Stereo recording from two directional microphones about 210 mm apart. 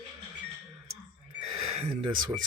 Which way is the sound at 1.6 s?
30° right (ahead or behind).